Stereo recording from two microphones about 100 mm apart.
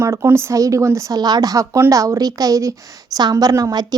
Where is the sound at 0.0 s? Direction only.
30° right (ahead or behind).